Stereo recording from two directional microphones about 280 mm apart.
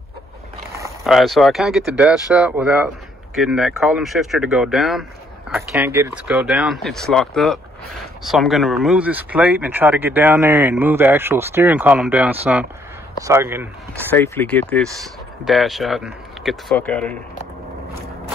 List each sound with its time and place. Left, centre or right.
1.0 s speech: centre
14.1 s speech: centre